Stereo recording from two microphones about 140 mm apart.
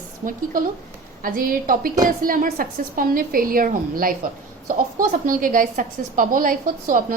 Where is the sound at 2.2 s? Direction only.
80° right.